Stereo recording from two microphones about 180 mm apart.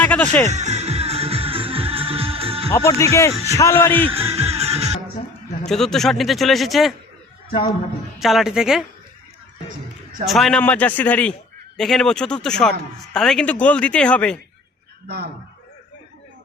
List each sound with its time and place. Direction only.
0.0 s speech: 10° left (ahead or behind)
0.4 s music: 40° right (ahead or behind)
2.7 s speech: 15° left (ahead or behind)
4.4 s music: 35° right (ahead or behind)
5.6 s speech: centre (ahead or behind)
8.2 s speech: centre (ahead or behind)
10.2 s speech: centre (ahead or behind)
15.0 s speech: 60° right (ahead or behind)